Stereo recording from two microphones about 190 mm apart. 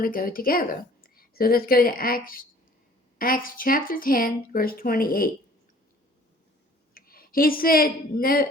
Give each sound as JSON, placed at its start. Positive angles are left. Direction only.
{"t": 0.0, "sound": "a woman's voice", "side_deg": 50}
{"t": 6.9, "sound": "a woman's voice", "side_deg": 50}